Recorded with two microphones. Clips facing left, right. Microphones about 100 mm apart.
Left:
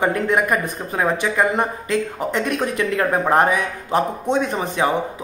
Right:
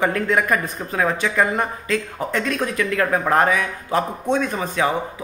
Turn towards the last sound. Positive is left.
turn(degrees=20)  # may be behind; listen again after turning